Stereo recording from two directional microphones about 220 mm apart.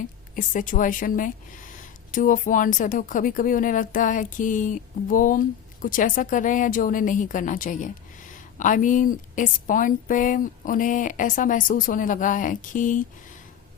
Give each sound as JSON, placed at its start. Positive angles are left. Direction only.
{"t": 0.3, "sound": "speech", "side_deg": 35}